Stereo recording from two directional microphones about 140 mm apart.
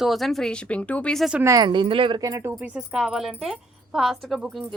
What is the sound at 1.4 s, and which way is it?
A woman's voice, 25° right (ahead or behind).